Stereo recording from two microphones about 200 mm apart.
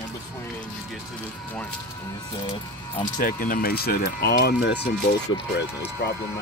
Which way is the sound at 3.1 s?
45° left (ahead or behind).